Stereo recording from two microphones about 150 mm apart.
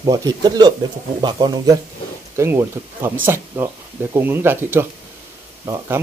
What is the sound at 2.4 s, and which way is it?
Speech, 15° right (ahead or behind).